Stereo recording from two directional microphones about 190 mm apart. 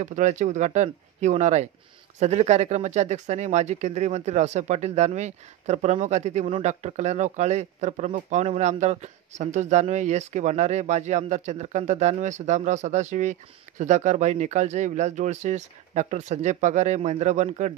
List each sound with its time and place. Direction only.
0.0 s speech: 40° right (ahead or behind)